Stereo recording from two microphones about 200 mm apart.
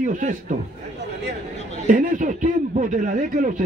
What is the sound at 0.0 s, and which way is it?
Speech, 40° right (ahead or behind).